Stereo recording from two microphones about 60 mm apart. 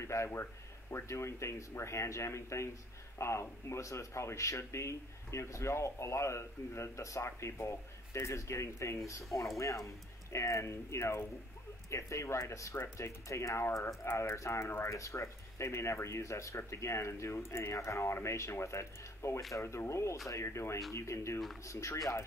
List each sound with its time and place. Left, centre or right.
0.0 s speech: left
12.7 s speech: left